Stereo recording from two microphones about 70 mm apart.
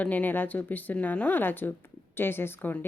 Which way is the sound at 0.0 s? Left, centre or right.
Left.